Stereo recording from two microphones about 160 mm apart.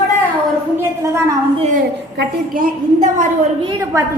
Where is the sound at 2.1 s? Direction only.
75° right (ahead or behind); by 3.2 s 55° right (ahead or behind).